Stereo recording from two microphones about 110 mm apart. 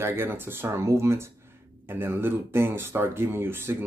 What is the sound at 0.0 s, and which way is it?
Speech, 20° right (ahead or behind).